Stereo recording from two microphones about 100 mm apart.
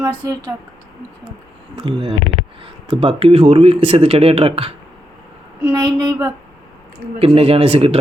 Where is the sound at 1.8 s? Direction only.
60° right (ahead or behind).